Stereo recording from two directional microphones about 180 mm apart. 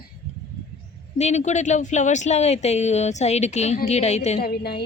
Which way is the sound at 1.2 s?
40° left (ahead or behind).